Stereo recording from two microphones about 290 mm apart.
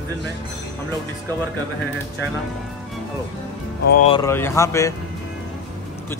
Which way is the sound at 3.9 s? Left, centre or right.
Left.